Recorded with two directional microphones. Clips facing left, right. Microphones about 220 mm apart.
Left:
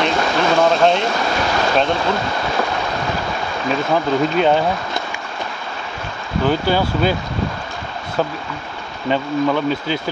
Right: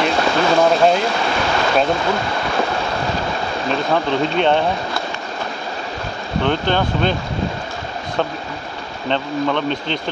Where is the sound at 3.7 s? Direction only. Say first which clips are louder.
Left 1 dB; 5° left (ahead or behind).